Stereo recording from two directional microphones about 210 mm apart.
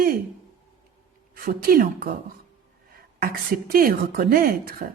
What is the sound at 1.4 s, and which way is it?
Speech, 45° right (ahead or behind).